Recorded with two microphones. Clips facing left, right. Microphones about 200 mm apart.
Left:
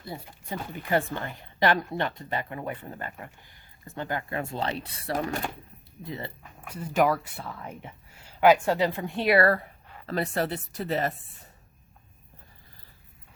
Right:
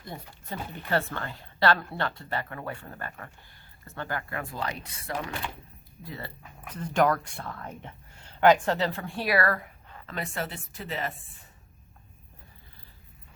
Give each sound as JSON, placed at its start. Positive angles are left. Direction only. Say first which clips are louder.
{"t": 0.3, "sound": "speech", "louder": "left 2 dB", "side_deg": 15}
{"t": 5.1, "sound": "speech", "louder": "left 5 dB", "side_deg": 45}
{"t": 6.0, "sound": "speech", "louder": "left 4 dB", "side_deg": 20}
{"t": 6.7, "sound": "speech", "louder": "even", "side_deg": 10}